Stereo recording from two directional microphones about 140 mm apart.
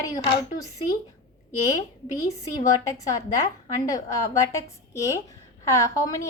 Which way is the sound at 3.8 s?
25° left (ahead or behind).